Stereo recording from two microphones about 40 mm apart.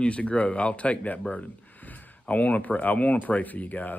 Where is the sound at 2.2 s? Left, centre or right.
Left.